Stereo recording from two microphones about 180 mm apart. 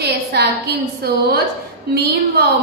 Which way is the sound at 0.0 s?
65° right (ahead or behind).